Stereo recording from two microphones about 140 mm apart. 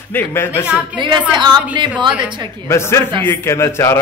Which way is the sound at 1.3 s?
30° right (ahead or behind).